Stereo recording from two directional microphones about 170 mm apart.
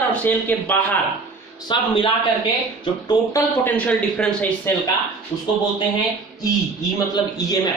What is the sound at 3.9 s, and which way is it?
Speech, 5° left (ahead or behind).